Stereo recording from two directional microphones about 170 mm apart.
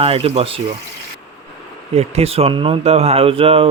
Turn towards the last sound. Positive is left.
turn(degrees=-35)  # may be behind; listen again after turning